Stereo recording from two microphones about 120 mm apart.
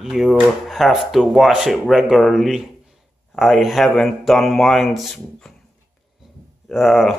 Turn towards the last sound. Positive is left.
turn(degrees=0)  # may be behind; listen again after turning